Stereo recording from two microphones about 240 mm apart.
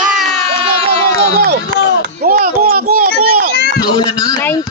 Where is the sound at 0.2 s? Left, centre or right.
Right.